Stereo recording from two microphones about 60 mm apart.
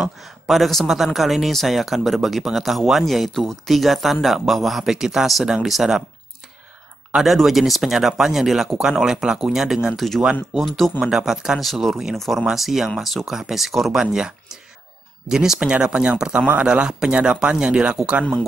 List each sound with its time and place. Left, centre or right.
0.0 s speech: centre
7.2 s speech: centre
9.9 s speech: centre
11.1 s speech: centre